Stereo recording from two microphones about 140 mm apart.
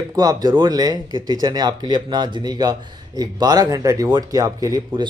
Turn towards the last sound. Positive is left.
turn(degrees=-30)  # may be behind; listen again after turning